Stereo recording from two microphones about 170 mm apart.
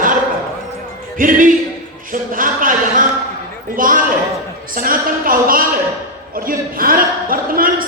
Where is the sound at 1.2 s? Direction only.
50° right (ahead or behind).